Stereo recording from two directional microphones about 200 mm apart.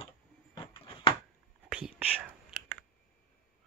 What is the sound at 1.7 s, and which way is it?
Whispering, 5° right (ahead or behind).